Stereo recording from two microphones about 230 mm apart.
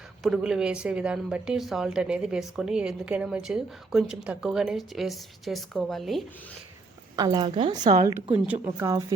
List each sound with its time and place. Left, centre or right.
0.2 s a woman's voice: centre
7.2 s a woman's voice: centre